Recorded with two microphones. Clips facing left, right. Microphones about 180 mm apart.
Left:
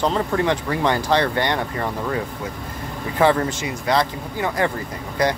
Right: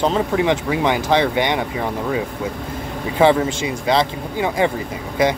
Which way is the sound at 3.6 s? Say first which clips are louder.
Right 3 dB; 25° right (ahead or behind).